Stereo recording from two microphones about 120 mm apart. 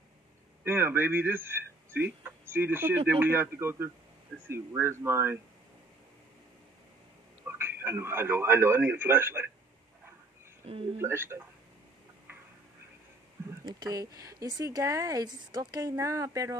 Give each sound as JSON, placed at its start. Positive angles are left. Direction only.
{"t": 0.7, "sound": "a man's voice", "side_deg": -20}
{"t": 7.4, "sound": "speech", "side_deg": -20}
{"t": 11.0, "sound": "speech", "side_deg": -20}
{"t": 13.7, "sound": "speech", "side_deg": -35}